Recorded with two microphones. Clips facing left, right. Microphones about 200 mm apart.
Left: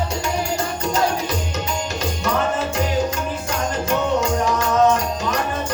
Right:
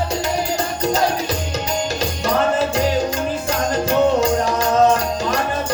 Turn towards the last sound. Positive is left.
turn(degrees=-35)  # may be behind; listen again after turning